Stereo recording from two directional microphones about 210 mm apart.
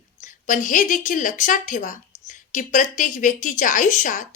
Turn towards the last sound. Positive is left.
turn(degrees=35)  # may be behind; listen again after turning